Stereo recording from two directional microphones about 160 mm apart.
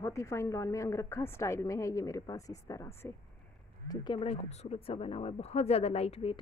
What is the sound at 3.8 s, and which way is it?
Speech, 30° left (ahead or behind).